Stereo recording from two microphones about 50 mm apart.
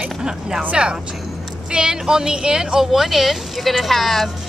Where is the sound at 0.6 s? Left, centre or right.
Right; by 4.3 s centre.